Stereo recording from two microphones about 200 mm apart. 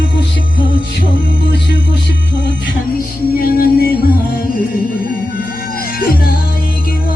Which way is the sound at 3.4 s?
50° left (ahead or behind).